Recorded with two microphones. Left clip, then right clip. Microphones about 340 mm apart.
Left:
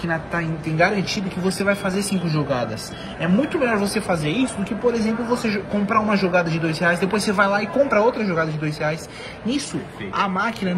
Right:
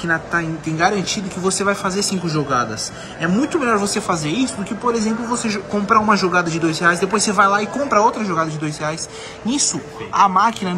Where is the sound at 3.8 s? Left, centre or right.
Right.